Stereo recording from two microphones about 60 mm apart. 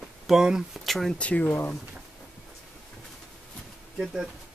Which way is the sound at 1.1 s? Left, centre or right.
Left.